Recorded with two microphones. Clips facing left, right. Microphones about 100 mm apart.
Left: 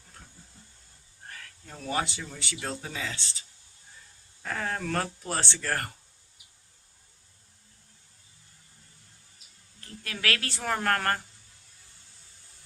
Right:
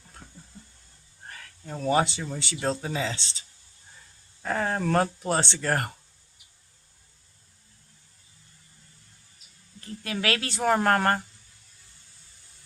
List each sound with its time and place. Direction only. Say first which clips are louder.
1.9 s speech: right 7 dB; 25° right (ahead or behind)
4.4 s speech: right 5 dB; 30° right (ahead or behind)
10.0 s speech: right 3 dB; 20° right (ahead or behind)